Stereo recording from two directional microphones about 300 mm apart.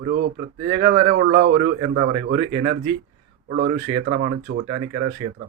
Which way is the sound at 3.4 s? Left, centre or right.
Right.